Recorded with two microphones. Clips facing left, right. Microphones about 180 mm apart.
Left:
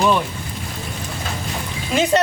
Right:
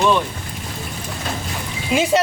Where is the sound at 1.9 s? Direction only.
5° right (ahead or behind).